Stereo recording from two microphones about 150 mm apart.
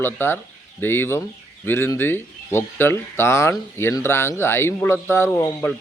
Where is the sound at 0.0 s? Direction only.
15° left (ahead or behind).